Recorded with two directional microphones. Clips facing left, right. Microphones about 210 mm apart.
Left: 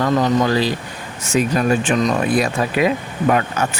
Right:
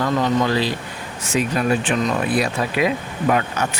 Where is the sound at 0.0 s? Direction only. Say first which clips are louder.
Left 3 dB; 45° left (ahead or behind).